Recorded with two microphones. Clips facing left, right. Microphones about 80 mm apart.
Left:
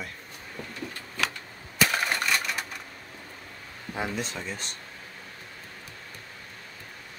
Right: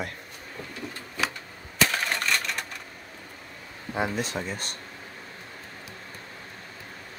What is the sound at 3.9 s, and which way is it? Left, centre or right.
Speech, centre.